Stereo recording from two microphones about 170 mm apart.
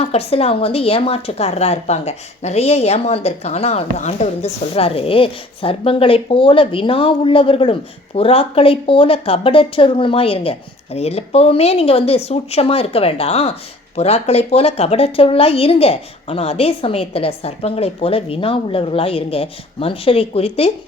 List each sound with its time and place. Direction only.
0.0 s a woman's voice: 35° left (ahead or behind)